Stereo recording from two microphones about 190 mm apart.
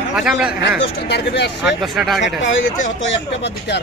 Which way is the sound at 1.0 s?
65° left (ahead or behind).